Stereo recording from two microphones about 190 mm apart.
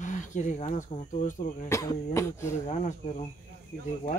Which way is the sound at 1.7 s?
20° left (ahead or behind).